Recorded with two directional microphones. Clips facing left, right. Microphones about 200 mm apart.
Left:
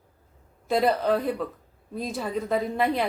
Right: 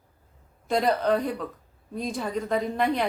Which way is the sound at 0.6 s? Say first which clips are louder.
Left 1 dB; 5° left (ahead or behind).